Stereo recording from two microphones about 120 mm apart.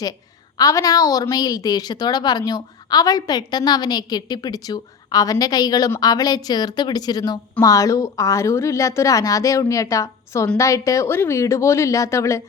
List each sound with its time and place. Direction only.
0.5 s a woman's voice: 30° left (ahead or behind)